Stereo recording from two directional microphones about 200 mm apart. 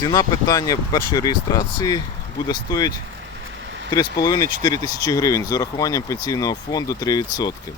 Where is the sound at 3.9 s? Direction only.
20° left (ahead or behind).